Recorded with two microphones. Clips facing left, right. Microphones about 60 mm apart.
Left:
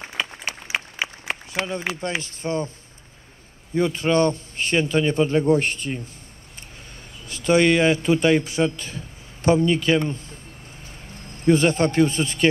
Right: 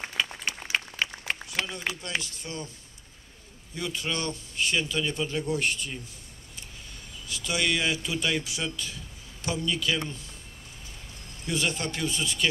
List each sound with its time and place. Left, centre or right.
0.7 s applause: centre
1.3 s a man's voice: left
3.7 s a man's voice: left
7.2 s a man's voice: left
11.4 s a man's voice: left